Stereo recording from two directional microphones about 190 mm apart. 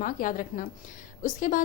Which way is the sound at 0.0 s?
45° left (ahead or behind).